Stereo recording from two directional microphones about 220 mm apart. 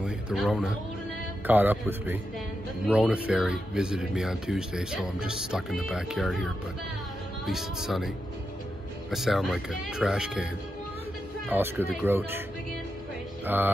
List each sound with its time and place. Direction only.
0.0 s speech: centre (ahead or behind)
9.1 s speech: centre (ahead or behind)